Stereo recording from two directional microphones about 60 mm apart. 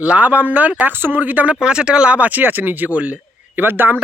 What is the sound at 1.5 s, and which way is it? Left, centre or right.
Speech, centre.